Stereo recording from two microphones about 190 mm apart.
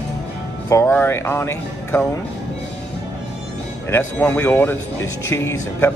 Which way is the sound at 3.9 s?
10° left (ahead or behind).